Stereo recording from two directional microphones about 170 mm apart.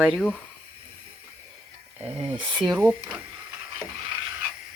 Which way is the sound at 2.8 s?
10° right (ahead or behind).